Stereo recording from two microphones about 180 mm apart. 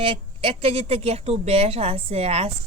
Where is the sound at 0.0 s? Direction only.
30° right (ahead or behind).